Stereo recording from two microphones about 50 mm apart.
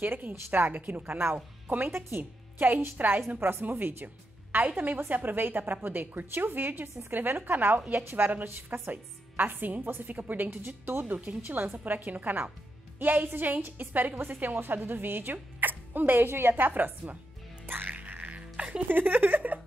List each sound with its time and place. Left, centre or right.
0.0 s a woman's voice: right
1.8 s speech: right
2.6 s a woman's voice: right
8.0 s a woman's voice: right
8.9 s a woman's voice: right
17.6 s music: right
18.9 s a woman's voice: right